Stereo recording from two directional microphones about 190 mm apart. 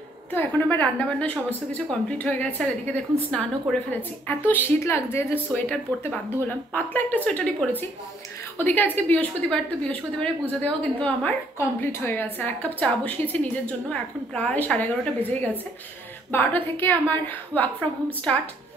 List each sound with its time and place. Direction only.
0.3 s a woman's voice: 10° left (ahead or behind)